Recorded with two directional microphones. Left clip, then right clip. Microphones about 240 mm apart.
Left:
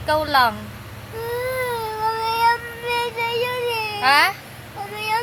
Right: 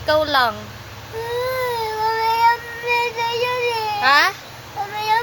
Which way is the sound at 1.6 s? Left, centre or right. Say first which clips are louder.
Right 2 dB; right.